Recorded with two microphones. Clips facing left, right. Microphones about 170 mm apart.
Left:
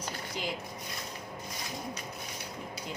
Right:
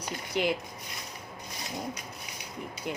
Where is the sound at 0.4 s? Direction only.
65° right (ahead or behind).